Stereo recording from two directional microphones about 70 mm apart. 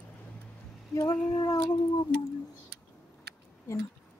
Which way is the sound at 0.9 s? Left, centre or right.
Left.